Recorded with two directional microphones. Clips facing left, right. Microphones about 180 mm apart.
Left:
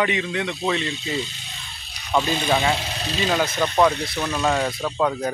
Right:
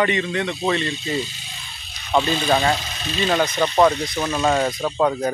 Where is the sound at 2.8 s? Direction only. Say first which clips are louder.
Left 1 dB; 35° left (ahead or behind).